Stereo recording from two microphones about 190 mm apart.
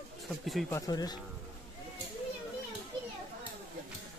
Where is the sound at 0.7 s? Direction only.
20° left (ahead or behind).